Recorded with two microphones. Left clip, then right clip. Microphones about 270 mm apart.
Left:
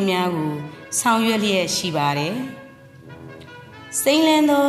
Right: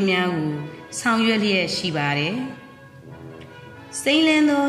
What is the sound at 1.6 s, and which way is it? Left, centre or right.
Music, left.